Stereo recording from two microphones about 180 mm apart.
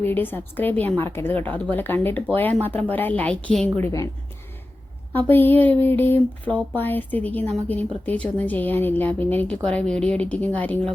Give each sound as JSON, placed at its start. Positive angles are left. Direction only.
{"t": 0.0, "sound": "speech", "side_deg": 10}
{"t": 5.1, "sound": "speech", "side_deg": 10}